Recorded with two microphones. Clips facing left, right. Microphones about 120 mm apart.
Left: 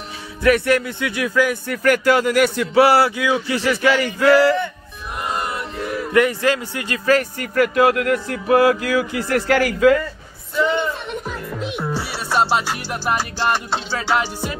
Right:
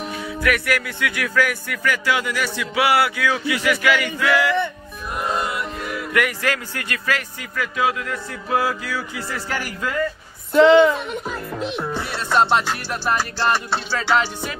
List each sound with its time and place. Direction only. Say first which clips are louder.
0.4 s speech: left 6 dB; 30° left (ahead or behind)
1.7 s speech: left 6 dB; 45° left (ahead or behind)
3.2 s speech: left 3 dB; 20° left (ahead or behind)
3.4 s speech: even; 35° left (ahead or behind)
6.1 s speech: left 6 dB; 25° left (ahead or behind)
7.1 s speech: left 11 dB; 45° left (ahead or behind); by 9.9 s 90° left
10.5 s a woman's voice: right 8 dB; 85° right
11.2 s speech: even; 5° left (ahead or behind)
12.0 s music: right 2 dB; 5° left (ahead or behind)